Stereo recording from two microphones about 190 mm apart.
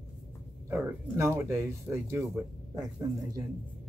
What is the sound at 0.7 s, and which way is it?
Speech, 10° right (ahead or behind).